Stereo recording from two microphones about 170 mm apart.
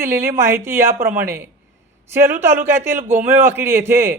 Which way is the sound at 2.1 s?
15° right (ahead or behind).